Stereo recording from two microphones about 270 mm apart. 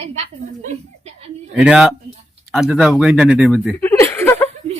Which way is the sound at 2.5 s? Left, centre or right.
Centre.